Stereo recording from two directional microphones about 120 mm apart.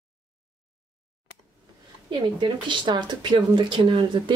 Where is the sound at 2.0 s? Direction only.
40° right (ahead or behind).